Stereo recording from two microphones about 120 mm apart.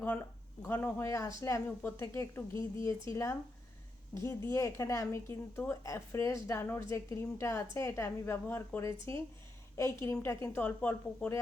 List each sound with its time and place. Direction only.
0.6 s a woman's voice: 15° left (ahead or behind)